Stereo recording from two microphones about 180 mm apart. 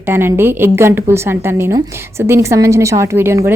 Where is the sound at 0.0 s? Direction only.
15° right (ahead or behind).